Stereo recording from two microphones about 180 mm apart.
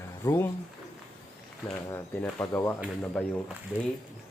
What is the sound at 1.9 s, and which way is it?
Speech, 15° left (ahead or behind).